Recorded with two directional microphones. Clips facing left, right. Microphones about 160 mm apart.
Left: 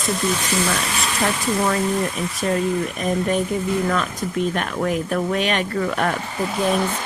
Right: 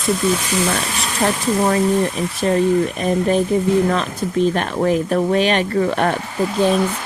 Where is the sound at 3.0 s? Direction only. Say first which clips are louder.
Right 4 dB; 30° right (ahead or behind).